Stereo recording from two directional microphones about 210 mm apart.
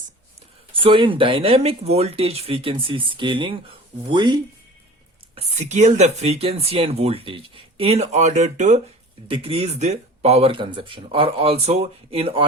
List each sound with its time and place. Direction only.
0.7 s speech: 25° right (ahead or behind)
5.3 s speech: 35° right (ahead or behind)